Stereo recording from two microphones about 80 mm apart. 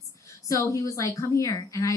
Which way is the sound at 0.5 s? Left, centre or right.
Left.